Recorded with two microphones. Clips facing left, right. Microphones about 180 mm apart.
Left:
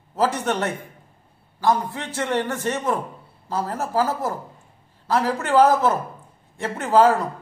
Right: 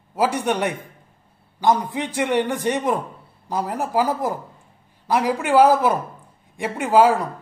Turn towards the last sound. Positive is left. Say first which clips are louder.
# right 1 dB
turn(degrees=-10)  # may be behind; listen again after turning